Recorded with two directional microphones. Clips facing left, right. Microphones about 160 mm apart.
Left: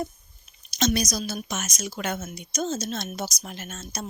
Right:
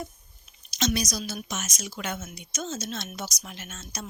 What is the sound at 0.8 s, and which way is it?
A woman's voice, 45° left (ahead or behind).